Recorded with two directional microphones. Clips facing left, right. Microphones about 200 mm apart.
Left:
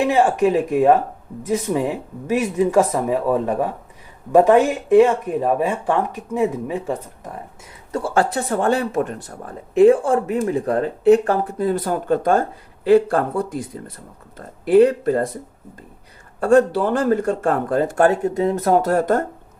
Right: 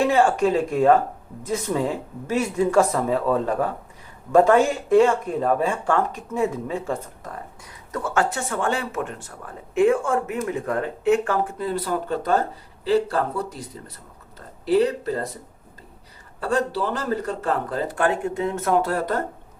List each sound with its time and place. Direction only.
0.0 s speech: 20° left (ahead or behind)
7.9 s speech: 30° left (ahead or behind); by 15.3 s 50° left (ahead or behind)
16.4 s speech: 50° left (ahead or behind)